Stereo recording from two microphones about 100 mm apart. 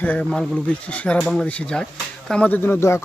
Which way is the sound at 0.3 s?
5° left (ahead or behind).